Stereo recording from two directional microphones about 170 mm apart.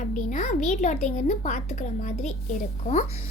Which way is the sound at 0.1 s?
45° left (ahead or behind).